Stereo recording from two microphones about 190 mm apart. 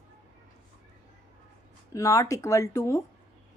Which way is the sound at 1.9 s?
15° left (ahead or behind).